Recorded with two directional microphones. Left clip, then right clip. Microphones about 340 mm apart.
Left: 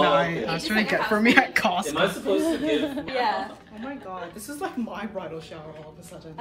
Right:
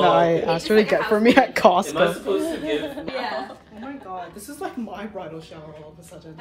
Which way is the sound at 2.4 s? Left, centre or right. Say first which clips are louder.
Left 1 dB; left.